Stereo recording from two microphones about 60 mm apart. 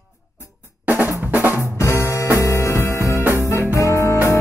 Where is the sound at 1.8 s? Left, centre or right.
Left.